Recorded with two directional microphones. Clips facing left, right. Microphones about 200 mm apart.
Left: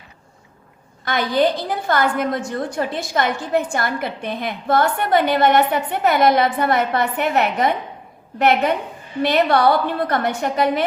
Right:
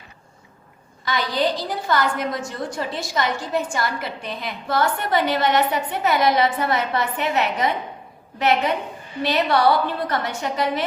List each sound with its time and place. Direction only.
1.0 s a woman's voice: 55° left (ahead or behind)